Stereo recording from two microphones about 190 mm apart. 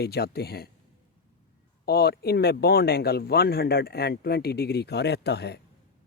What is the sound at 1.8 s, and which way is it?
Speech, 55° left (ahead or behind).